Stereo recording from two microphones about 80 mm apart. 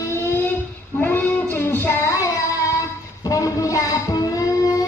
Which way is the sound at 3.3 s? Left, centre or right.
Left.